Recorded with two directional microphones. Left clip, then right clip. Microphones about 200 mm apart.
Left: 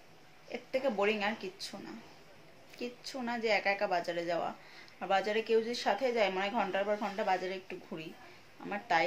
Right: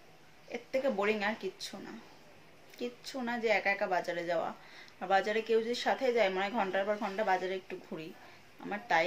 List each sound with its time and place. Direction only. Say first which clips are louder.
0.5 s speech: right 1 dB; 5° right (ahead or behind)
3.1 s a woman's voice: right 1 dB; 5° right (ahead or behind)